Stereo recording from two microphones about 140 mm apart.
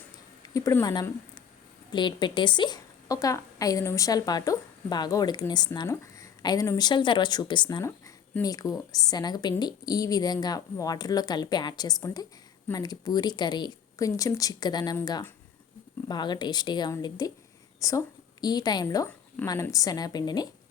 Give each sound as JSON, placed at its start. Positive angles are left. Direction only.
{"t": 0.5, "sound": "a woman's voice", "side_deg": 25}
{"t": 16.0, "sound": "a woman's voice", "side_deg": 30}